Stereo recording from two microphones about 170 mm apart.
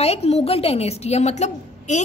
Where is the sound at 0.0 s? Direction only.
40° left (ahead or behind).